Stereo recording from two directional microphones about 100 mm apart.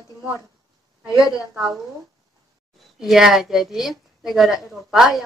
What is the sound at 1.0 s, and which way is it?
Speech, 35° left (ahead or behind).